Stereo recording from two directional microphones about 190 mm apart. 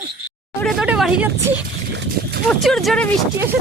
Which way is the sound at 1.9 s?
65° right (ahead or behind).